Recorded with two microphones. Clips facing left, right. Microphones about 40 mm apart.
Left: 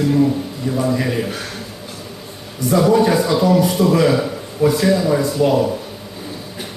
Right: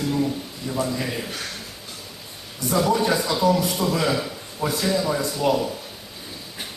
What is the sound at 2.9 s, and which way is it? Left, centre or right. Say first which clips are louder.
A man's voice: left 7 dB; left.